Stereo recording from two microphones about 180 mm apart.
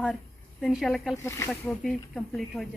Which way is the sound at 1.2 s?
15° left (ahead or behind).